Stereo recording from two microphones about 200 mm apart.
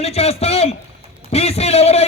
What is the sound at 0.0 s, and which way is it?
Speech, 30° left (ahead or behind).